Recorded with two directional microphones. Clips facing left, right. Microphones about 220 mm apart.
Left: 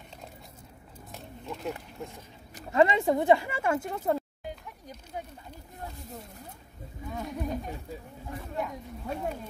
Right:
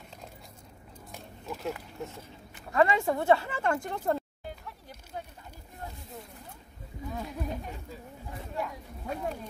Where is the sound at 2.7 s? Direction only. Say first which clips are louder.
Left 2 dB; 20° left (ahead or behind); by 4.2 s 5° left (ahead or behind).